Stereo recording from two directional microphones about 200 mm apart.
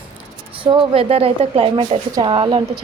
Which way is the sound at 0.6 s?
25° right (ahead or behind).